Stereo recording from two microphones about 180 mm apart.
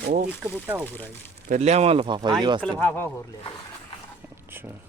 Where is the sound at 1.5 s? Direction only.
40° right (ahead or behind).